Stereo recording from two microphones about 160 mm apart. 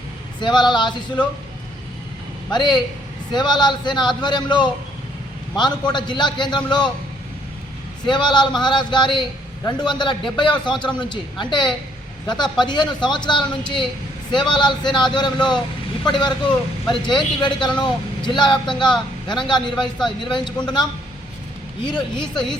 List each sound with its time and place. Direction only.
0.3 s a man's voice: 25° left (ahead or behind)
2.5 s a man's voice: 30° left (ahead or behind)
8.0 s a man's voice: 30° left (ahead or behind)
16.8 s a man's voice: 30° left (ahead or behind)
19.7 s speech: centre (ahead or behind)
20.1 s a man's voice: 30° left (ahead or behind)
22.1 s speech: 5° left (ahead or behind)